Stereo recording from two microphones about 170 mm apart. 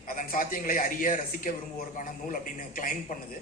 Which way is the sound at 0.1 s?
55° left (ahead or behind).